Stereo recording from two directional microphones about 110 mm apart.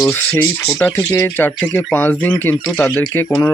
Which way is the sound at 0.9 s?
25° left (ahead or behind).